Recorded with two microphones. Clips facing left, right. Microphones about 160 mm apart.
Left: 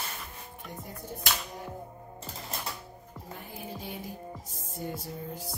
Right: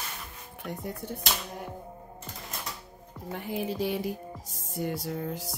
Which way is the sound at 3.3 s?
85° right.